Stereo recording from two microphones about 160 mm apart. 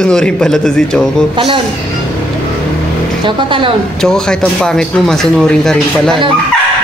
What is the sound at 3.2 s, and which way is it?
Speech, 30° right (ahead or behind).